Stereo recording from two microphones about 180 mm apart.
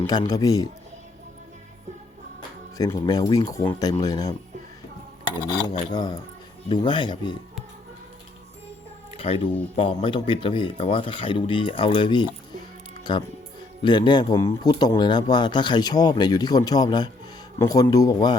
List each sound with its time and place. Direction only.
0.0 s speech: 25° left (ahead or behind)
2.7 s speech: 20° left (ahead or behind)
5.9 s speech: 20° left (ahead or behind)
9.1 s speech: 30° left (ahead or behind)